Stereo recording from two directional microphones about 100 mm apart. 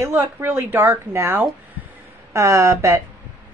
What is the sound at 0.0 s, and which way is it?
A woman's voice, 25° right (ahead or behind).